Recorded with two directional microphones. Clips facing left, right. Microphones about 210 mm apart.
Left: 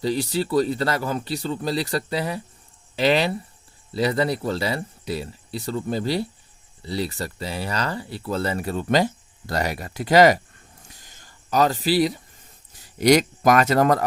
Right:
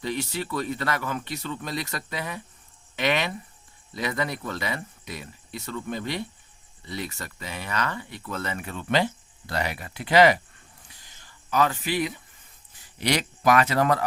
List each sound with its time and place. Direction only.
0.0 s speech: 35° left (ahead or behind)
10.8 s a sound: 45° left (ahead or behind)
12.7 s speech: 40° left (ahead or behind)